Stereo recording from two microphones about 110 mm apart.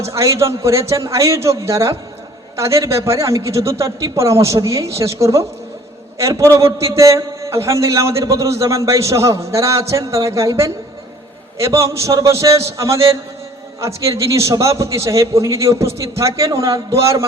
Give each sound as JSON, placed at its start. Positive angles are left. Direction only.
{"t": 0.0, "sound": "a man's voice", "side_deg": -30}